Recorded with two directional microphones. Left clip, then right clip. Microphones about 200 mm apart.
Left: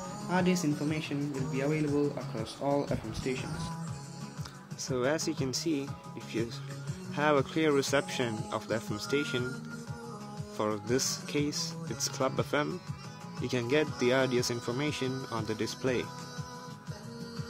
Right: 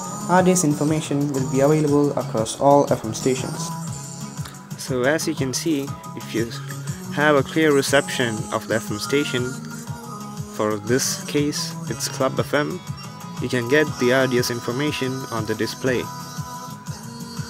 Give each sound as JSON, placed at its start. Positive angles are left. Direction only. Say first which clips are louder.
{"t": 0.3, "sound": "speech", "louder": "right 13 dB", "side_deg": -20}
{"t": 4.8, "sound": "speech", "louder": "right 10 dB", "side_deg": -5}
{"t": 7.2, "sound": "speech", "louder": "right 10 dB", "side_deg": -5}
{"t": 10.6, "sound": "speech", "louder": "right 9 dB", "side_deg": -5}